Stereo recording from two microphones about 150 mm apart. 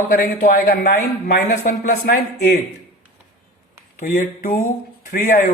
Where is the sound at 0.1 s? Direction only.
75° left (ahead or behind).